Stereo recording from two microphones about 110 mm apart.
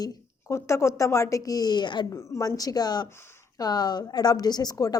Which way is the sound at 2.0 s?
25° left (ahead or behind).